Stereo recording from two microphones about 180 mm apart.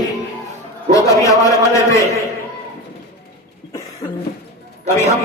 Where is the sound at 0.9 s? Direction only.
20° left (ahead or behind).